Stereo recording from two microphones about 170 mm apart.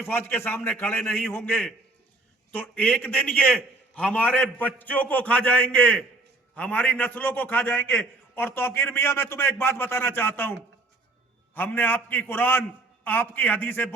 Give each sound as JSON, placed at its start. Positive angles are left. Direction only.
{"t": 0.0, "sound": "a man's voice", "side_deg": 15}
{"t": 11.5, "sound": "a man's voice", "side_deg": 10}